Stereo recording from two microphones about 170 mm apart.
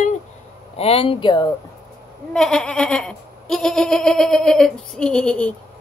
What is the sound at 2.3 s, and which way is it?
Goat, 5° left (ahead or behind).